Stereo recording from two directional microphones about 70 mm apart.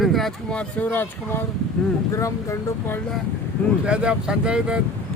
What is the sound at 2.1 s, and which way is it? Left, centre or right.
Speech, left.